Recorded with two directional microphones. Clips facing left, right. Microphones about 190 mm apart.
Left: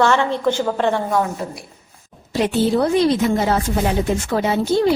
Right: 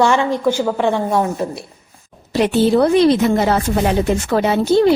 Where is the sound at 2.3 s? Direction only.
70° right (ahead or behind).